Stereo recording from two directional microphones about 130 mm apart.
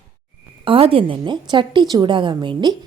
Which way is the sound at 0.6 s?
45° right (ahead or behind).